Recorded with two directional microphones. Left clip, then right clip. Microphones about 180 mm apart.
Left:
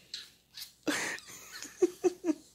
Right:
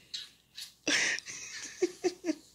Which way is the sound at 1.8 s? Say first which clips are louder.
Left 3 dB; 25° left (ahead or behind).